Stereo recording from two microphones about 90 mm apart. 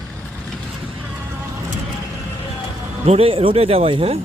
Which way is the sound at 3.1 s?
90° right.